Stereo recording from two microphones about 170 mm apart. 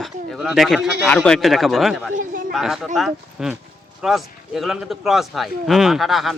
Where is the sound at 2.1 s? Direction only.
50° right (ahead or behind).